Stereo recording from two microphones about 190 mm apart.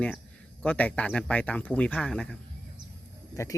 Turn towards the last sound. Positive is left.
turn(degrees=15)  # may be behind; listen again after turning